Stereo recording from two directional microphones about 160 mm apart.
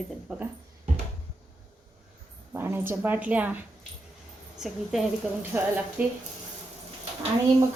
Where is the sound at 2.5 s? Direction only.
15° right (ahead or behind).